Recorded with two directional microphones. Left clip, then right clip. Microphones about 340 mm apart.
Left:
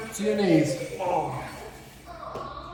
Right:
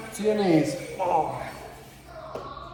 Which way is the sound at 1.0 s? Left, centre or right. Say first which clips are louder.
Right 3 dB; centre.